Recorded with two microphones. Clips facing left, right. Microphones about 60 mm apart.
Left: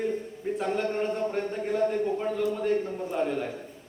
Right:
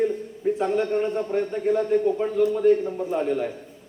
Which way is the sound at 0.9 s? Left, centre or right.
Centre.